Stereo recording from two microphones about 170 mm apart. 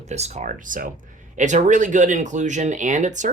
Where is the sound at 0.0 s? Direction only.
40° right (ahead or behind).